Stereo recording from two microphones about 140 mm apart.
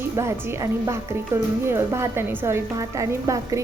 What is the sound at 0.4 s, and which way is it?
A woman's voice, 20° right (ahead or behind).